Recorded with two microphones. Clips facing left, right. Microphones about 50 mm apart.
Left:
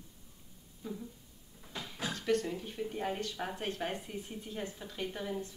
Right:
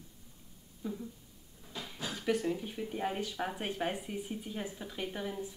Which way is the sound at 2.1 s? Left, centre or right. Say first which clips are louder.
Right 1 dB; centre.